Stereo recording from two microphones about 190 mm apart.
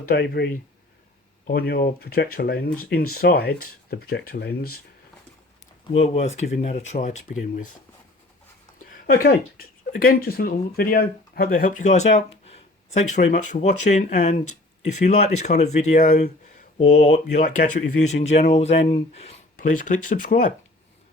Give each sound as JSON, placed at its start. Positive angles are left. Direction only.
{"t": 0.1, "sound": "speech", "side_deg": 60}
{"t": 5.9, "sound": "speech", "side_deg": 35}
{"t": 8.8, "sound": "speech", "side_deg": 50}
{"t": 19.8, "sound": "speech", "side_deg": 45}